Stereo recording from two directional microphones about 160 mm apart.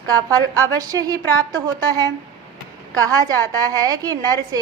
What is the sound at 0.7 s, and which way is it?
Speech, 25° right (ahead or behind).